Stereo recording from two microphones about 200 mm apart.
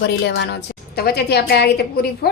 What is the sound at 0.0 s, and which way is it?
A woman's voice, 55° left (ahead or behind).